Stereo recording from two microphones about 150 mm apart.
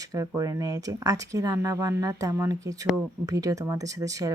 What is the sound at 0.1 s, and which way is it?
Speech, 25° right (ahead or behind).